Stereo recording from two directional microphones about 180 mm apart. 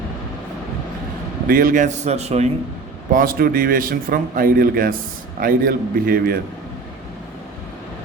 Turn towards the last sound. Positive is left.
turn(degrees=-55)  # may be behind; listen again after turning